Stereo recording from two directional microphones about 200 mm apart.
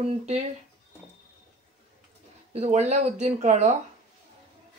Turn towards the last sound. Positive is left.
turn(degrees=-35)  # may be behind; listen again after turning